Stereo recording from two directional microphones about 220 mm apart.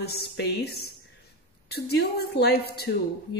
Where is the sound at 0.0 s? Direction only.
45° left (ahead or behind).